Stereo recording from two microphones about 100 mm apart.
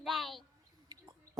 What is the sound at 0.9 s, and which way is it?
Bird, 40° right (ahead or behind).